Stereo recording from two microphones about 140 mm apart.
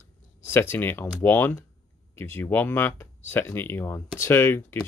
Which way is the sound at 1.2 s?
15° left (ahead or behind).